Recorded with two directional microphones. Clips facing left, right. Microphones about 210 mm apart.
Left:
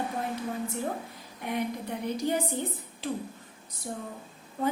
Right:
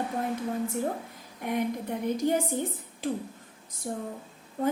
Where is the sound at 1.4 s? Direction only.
50° right (ahead or behind).